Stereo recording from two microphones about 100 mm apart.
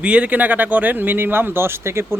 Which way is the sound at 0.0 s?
15° right (ahead or behind).